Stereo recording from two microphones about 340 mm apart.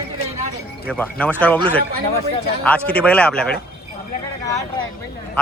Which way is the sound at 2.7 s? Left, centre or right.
Centre.